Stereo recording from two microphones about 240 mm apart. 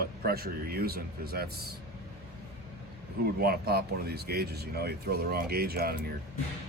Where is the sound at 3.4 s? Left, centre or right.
Right.